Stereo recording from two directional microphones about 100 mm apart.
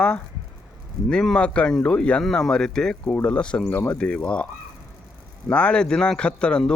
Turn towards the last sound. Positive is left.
turn(degrees=10)  # may be behind; listen again after turning